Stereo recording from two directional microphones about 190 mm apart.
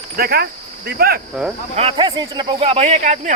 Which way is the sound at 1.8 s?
30° right (ahead or behind).